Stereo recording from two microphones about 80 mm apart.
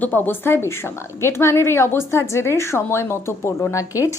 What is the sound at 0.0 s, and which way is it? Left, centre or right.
Speech, left.